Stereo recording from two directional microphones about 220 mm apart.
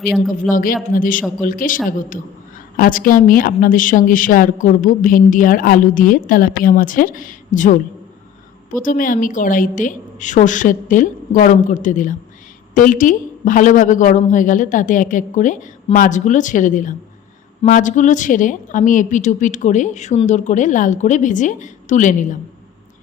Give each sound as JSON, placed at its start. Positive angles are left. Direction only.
{"t": 0.5, "sound": "a woman's voice", "side_deg": 40}